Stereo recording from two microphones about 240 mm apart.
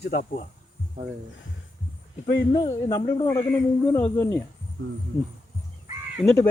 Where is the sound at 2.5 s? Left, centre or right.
Centre.